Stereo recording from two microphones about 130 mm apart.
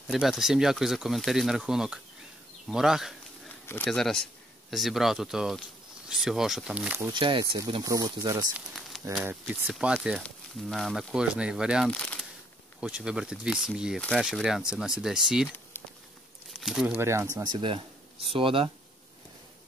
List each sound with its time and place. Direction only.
0.1 s speech: centre (ahead or behind)
3.6 s speech: 15° left (ahead or behind)
3.9 s speech: 5° left (ahead or behind)
7.1 s speech: 40° right (ahead or behind)
7.8 s speech: 30° right (ahead or behind)
8.7 s a sound: centre (ahead or behind)
9.2 s speech: 10° right (ahead or behind)
11.9 s shuffling cards: 10° left (ahead or behind)
12.8 s speech: 10° right (ahead or behind)
16.5 s speech: 5° right (ahead or behind)
16.9 s speech: 20° right (ahead or behind)
17.4 s speech: 40° right (ahead or behind)